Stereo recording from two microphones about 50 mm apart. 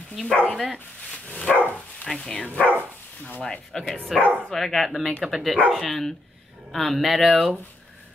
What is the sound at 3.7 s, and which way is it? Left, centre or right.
Speech, centre.